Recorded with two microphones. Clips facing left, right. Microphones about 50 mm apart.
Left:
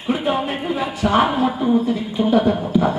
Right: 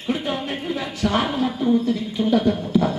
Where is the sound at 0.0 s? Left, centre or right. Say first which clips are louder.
Left 5 dB; centre.